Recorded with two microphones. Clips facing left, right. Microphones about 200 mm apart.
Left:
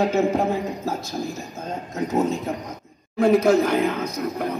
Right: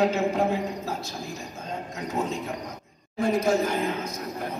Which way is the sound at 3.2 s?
70° left (ahead or behind).